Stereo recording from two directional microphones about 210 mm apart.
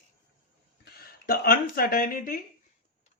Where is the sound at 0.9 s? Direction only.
45° left (ahead or behind).